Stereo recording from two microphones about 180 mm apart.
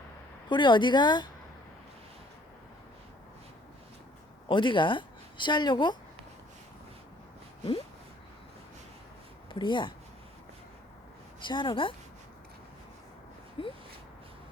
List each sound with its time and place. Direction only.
0.4 s a woman's voice: 25° left (ahead or behind)
4.4 s a woman's voice: 25° left (ahead or behind)
9.5 s speech: 25° left (ahead or behind)
11.3 s a woman's voice: 25° left (ahead or behind)
13.6 s a sound: 30° left (ahead or behind)